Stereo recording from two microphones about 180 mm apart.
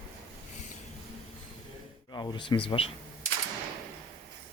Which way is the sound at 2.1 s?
25° left (ahead or behind).